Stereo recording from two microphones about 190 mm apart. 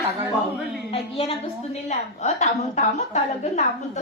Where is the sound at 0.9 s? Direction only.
30° left (ahead or behind).